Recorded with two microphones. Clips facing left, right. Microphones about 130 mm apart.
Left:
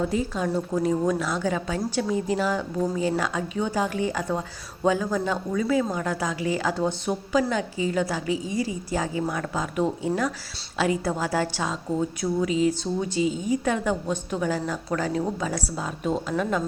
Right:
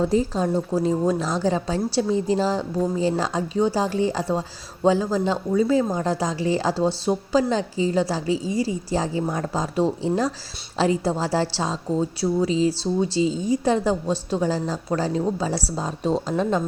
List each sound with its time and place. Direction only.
0.0 s a woman's voice: 35° right (ahead or behind)